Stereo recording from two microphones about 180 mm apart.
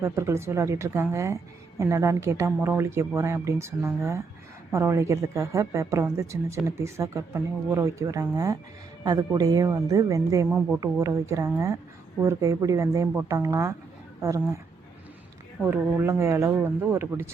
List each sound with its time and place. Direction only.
0.0 s a woman's voice: 15° right (ahead or behind)
15.6 s a woman's voice: 10° right (ahead or behind)